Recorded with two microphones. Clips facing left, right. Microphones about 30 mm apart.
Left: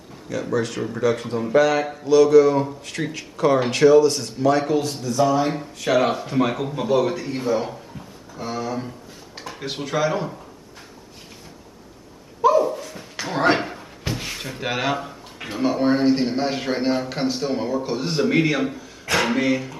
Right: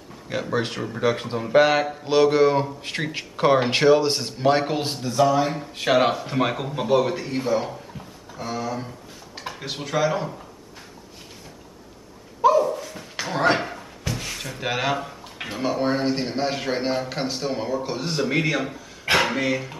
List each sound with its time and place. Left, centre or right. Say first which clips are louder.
0.3 s speech: left 1 dB; right
0.7 s a man's voice: left 3 dB; centre
1.5 s speech: right 1 dB; right
5.4 s a man's voice: left 1 dB; centre
5.9 s speech: even; right
6.2 s a man's voice: left 2 dB; centre
12.4 s dog: left 1 dB; centre
13.2 s a sound: left 1 dB; centre
14.1 s drawer open or close: left 2 dB; centre
15.4 s a man's voice: left 3 dB; centre